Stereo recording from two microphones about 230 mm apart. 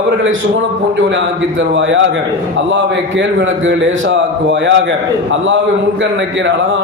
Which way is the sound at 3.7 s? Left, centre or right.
Right.